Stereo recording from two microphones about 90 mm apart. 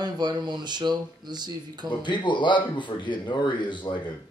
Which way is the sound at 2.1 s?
60° left (ahead or behind).